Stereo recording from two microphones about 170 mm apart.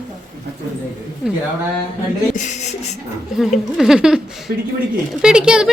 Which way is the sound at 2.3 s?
45° left (ahead or behind).